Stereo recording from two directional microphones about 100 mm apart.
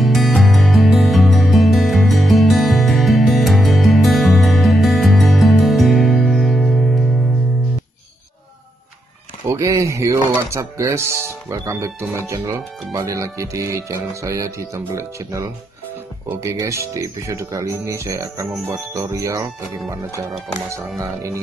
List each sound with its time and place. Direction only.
0.0 s music: centre (ahead or behind)
9.5 s speech: 30° right (ahead or behind)
20.7 s speech: 30° right (ahead or behind)